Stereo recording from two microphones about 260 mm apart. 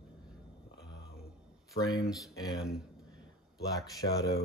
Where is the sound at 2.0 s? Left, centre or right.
Centre.